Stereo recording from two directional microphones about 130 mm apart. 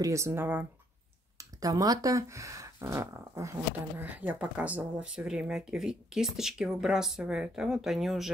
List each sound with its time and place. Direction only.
0.0 s speech: 20° right (ahead or behind)
1.4 s speech: 25° right (ahead or behind)
4.0 s speech: 10° right (ahead or behind)